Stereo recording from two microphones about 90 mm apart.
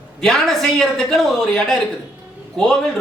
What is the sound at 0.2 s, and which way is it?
A man's voice, 5° left (ahead or behind).